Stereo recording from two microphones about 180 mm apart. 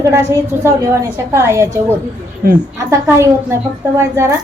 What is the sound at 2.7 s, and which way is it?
A woman's voice, 15° right (ahead or behind).